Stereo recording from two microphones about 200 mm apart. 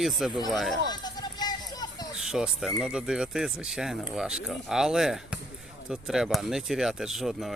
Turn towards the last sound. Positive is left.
turn(degrees=0)  # may be behind; listen again after turning